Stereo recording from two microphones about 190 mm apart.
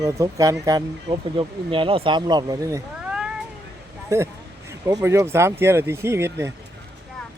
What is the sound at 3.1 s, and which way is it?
Cat, 5° right (ahead or behind).